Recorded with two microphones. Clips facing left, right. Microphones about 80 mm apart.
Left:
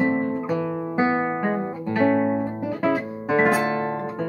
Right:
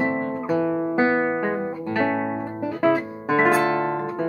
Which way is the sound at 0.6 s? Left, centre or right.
Right.